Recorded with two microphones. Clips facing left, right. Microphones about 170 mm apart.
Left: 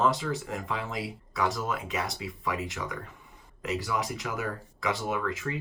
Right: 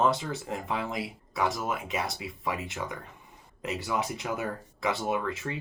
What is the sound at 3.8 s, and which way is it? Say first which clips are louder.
Speech: right 1 dB; 25° right (ahead or behind).